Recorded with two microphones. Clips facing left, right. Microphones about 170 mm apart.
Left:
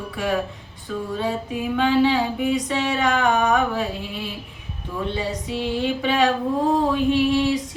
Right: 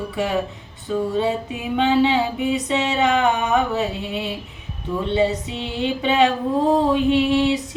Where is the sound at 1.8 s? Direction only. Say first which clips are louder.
Right 1 dB; 25° right (ahead or behind).